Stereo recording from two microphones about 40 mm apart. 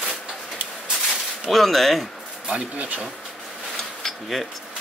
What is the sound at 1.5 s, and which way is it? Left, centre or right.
Speech, centre.